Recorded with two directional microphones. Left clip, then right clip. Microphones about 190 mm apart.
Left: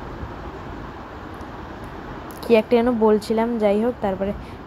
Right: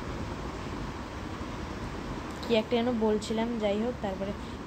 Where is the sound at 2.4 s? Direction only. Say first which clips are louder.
Left 11 dB; 30° left (ahead or behind).